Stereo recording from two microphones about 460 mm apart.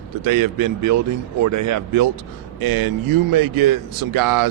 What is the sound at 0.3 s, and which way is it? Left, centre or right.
A man's voice, right.